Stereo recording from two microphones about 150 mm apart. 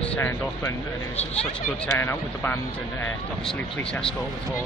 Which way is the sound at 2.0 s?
15° left (ahead or behind).